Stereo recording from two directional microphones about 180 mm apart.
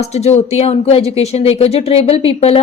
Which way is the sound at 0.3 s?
35° left (ahead or behind).